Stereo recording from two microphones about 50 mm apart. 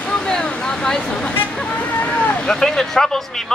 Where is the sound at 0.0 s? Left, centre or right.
Centre.